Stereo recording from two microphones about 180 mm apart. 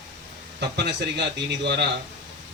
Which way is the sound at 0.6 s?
70° right (ahead or behind).